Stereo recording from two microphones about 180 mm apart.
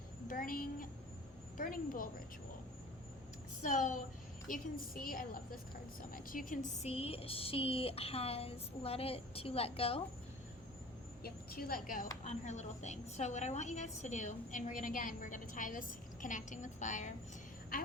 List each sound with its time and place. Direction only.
0.3 s a child's voice: 50° left (ahead or behind)
3.6 s a woman's voice: 45° left (ahead or behind)
11.2 s a woman's voice: 55° left (ahead or behind)
12.2 s a woman's voice: 40° left (ahead or behind)